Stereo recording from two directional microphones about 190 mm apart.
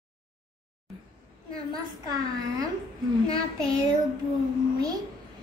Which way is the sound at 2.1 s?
20° right (ahead or behind).